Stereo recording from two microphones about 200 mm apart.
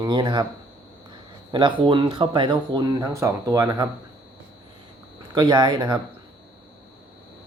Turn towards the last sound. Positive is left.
turn(degrees=-20)  # may be behind; listen again after turning